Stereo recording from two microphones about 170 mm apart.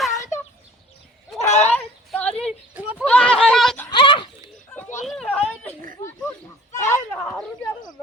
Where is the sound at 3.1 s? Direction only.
5° left (ahead or behind).